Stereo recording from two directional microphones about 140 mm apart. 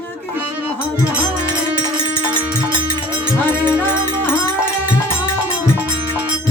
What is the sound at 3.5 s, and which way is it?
Music, 10° right (ahead or behind).